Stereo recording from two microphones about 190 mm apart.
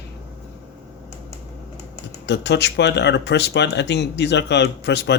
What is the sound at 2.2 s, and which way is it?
Speech, 65° left (ahead or behind).